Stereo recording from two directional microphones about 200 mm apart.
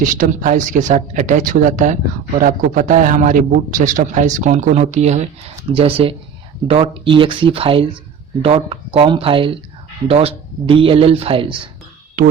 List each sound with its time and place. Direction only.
0.0 s a man's voice: 40° right (ahead or behind); by 11.7 s 25° right (ahead or behind)